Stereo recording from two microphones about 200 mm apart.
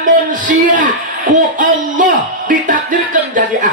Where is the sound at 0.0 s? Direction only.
40° right (ahead or behind).